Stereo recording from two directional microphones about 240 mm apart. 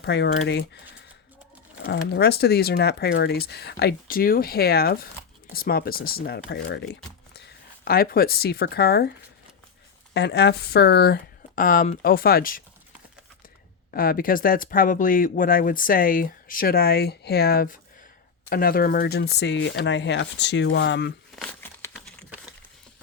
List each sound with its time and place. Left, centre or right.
0.0 s speech: left
1.8 s speech: left
10.2 s speech: left
13.9 s speech: left
21.3 s crumpling: centre